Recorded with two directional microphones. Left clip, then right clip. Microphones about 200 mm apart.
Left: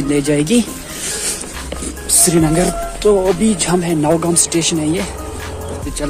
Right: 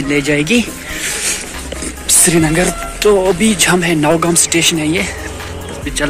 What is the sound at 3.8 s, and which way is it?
Speech, 5° left (ahead or behind).